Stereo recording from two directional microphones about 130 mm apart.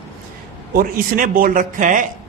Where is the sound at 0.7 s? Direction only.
90° right.